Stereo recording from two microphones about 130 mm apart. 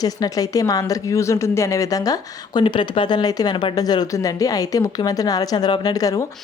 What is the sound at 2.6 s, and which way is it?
Speech, 40° left (ahead or behind).